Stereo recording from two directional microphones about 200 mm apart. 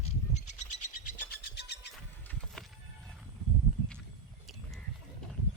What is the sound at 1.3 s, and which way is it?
Bird, 55° left (ahead or behind).